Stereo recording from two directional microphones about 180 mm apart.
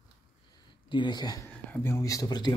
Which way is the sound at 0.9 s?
25° left (ahead or behind).